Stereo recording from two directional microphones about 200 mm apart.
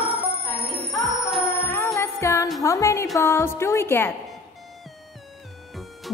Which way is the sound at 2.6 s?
15° left (ahead or behind).